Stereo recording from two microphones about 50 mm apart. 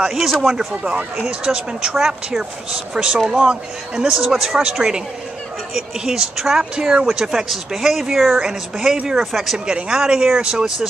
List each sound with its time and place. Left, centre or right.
0.1 s speech: centre
0.5 s speech: centre
4.2 s speech: centre
9.7 s speech: centre